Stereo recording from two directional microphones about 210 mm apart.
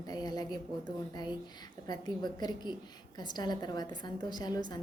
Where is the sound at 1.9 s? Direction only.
20° left (ahead or behind).